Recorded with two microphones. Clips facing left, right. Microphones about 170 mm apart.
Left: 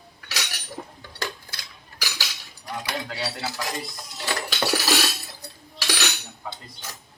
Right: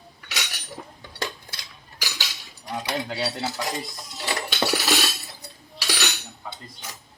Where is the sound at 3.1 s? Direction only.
20° right (ahead or behind).